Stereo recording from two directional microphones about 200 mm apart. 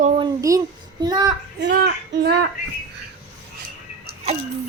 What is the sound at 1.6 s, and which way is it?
Speech, 55° right (ahead or behind).